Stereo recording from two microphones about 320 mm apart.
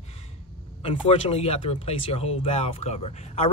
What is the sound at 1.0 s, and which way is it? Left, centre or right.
Speech, centre.